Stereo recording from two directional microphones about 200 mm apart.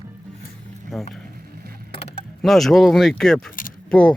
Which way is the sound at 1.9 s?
25° left (ahead or behind).